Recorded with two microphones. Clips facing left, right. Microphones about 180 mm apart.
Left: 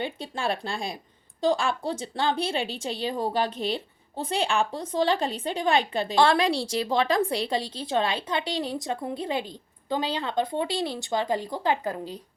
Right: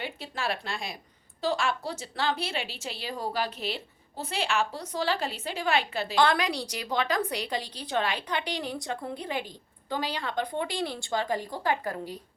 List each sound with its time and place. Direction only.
0.0 s a woman's voice: 30° left (ahead or behind)